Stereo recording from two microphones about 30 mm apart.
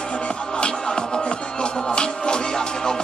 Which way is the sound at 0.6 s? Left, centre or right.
Left.